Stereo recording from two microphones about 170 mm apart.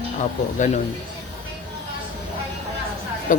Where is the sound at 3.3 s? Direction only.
50° left (ahead or behind).